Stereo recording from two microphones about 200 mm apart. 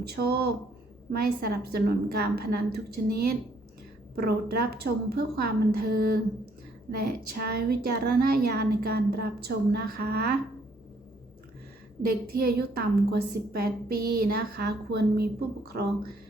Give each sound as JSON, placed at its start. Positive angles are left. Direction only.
{"t": 0.1, "sound": "a woman's voice", "side_deg": -50}
{"t": 12.0, "sound": "a woman's voice", "side_deg": -50}